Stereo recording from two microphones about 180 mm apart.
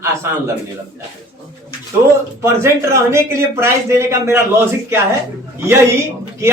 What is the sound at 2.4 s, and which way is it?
A man's voice, 15° right (ahead or behind).